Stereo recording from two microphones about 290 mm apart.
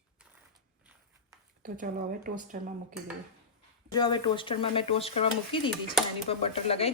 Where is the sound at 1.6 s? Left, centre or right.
Right.